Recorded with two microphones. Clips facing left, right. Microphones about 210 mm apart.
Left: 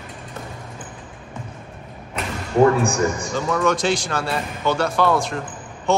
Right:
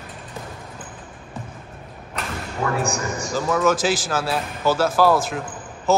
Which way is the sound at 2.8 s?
55° left (ahead or behind).